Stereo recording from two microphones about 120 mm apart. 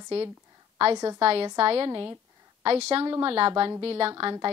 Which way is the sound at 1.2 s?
50° right (ahead or behind).